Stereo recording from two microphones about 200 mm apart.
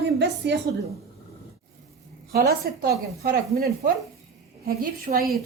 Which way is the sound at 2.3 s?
50° right (ahead or behind).